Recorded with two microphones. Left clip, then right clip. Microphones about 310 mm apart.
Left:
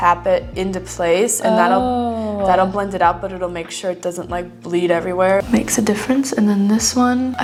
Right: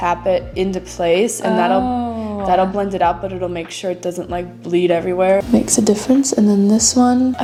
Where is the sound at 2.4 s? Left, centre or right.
Left.